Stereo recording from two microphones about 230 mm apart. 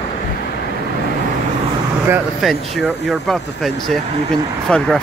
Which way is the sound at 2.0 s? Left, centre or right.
Centre.